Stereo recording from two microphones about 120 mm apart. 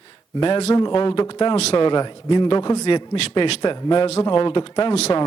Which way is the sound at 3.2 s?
55° left (ahead or behind).